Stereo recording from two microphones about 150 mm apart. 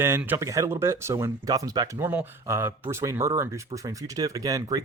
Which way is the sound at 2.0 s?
10° right (ahead or behind).